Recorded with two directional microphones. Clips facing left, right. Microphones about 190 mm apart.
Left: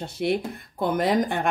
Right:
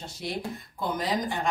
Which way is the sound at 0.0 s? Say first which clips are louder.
Left 9 dB; 60° left (ahead or behind).